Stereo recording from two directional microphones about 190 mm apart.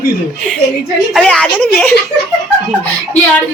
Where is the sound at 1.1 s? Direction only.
5° left (ahead or behind).